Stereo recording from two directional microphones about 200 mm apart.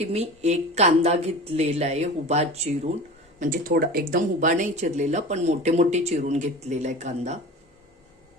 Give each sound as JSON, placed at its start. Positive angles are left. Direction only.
{"t": 0.0, "sound": "speech", "side_deg": -30}
{"t": 3.4, "sound": "speech", "side_deg": -45}